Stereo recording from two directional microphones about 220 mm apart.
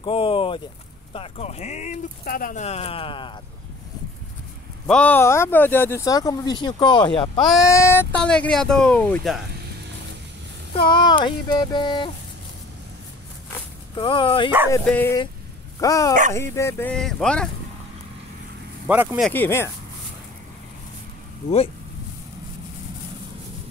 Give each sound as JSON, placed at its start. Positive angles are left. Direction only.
{"t": 0.0, "sound": "speech", "side_deg": 25}
{"t": 4.8, "sound": "speech", "side_deg": 5}
{"t": 7.4, "sound": "speech", "side_deg": 0}
{"t": 7.7, "sound": "speech", "side_deg": 10}
{"t": 10.7, "sound": "speech", "side_deg": 20}
{"t": 13.9, "sound": "speech", "side_deg": 25}
{"t": 14.7, "sound": "speech", "side_deg": 10}
{"t": 18.9, "sound": "speech", "side_deg": -5}
{"t": 19.3, "sound": "speech", "side_deg": 10}